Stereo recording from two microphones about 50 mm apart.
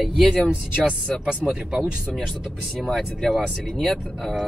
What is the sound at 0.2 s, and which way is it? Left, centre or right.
Speech, centre.